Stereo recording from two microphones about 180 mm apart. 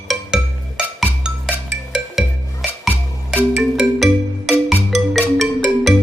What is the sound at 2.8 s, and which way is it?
Music, 10° left (ahead or behind).